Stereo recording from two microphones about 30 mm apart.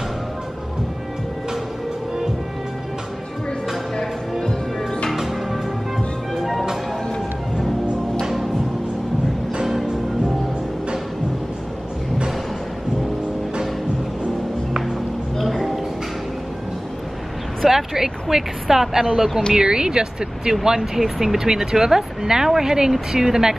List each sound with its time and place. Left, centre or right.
4.4 s music: left
5.1 s music: centre
9.7 s music: centre
15.3 s music: centre
17.6 s a woman's voice: centre
19.5 s speech: right